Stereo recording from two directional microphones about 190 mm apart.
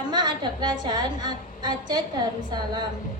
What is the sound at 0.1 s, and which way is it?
A woman's voice, 25° right (ahead or behind).